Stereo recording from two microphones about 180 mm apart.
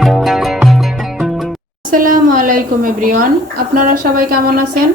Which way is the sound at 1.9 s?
50° right (ahead or behind).